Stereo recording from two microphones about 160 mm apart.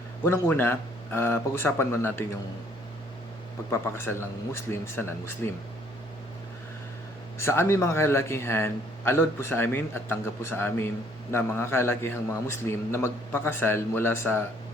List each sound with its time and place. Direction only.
0.3 s a man's voice: 15° left (ahead or behind)
3.7 s a man's voice: 15° left (ahead or behind)
7.3 s a man's voice: 15° left (ahead or behind)